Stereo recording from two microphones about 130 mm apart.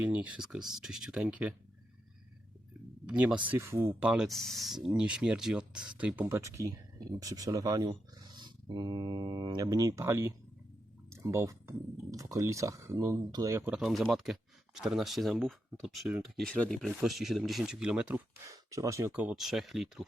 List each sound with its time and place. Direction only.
0.0 s speech: 10° right (ahead or behind)
3.1 s speech: 10° right (ahead or behind)
4.0 s speech: 5° right (ahead or behind)
6.2 s speech: 20° right (ahead or behind)
13.7 s speech: 5° right (ahead or behind)
18.4 s speech: 25° right (ahead or behind)
19.1 s speech: 10° right (ahead or behind)